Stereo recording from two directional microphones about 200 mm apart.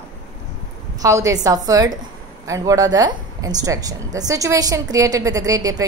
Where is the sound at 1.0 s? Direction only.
15° right (ahead or behind).